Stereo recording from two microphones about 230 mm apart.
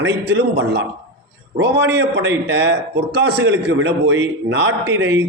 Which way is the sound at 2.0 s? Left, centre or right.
Right.